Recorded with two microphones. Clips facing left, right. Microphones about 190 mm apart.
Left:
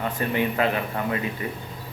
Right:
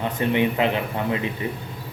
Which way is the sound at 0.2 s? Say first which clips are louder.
Right 3 dB; 20° right (ahead or behind).